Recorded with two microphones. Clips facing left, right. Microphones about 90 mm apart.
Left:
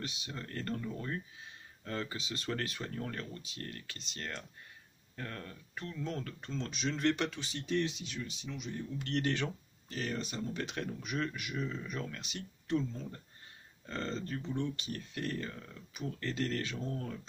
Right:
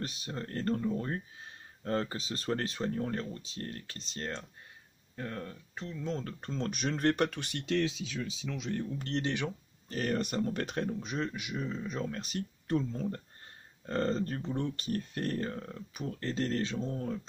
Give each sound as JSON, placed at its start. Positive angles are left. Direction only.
{"t": 0.0, "sound": "speech", "side_deg": -40}
{"t": 5.1, "sound": "a man's voice", "side_deg": -20}
{"t": 6.2, "sound": "speech", "side_deg": -40}
{"t": 8.9, "sound": "speech", "side_deg": -35}
{"t": 9.2, "sound": "speech", "side_deg": -15}
{"t": 9.8, "sound": "speech", "side_deg": -50}
{"t": 10.9, "sound": "a man's voice", "side_deg": -30}
{"t": 12.1, "sound": "speech", "side_deg": -40}